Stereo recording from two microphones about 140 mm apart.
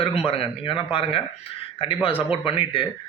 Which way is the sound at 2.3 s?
35° left (ahead or behind).